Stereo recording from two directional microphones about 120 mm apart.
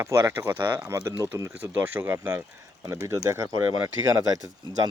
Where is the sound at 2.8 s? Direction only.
25° right (ahead or behind).